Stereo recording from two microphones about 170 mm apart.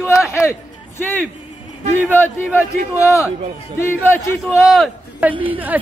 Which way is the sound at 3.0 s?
20° left (ahead or behind).